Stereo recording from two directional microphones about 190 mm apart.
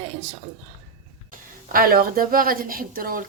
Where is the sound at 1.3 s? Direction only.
50° right (ahead or behind).